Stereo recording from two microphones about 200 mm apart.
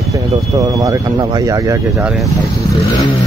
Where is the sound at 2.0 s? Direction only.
Centre (ahead or behind).